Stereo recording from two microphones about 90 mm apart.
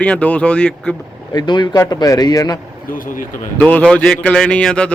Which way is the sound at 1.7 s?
40° left (ahead or behind).